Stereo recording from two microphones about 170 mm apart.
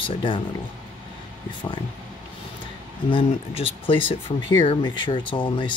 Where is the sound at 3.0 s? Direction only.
30° left (ahead or behind).